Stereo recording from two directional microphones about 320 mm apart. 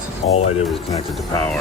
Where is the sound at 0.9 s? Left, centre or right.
Centre.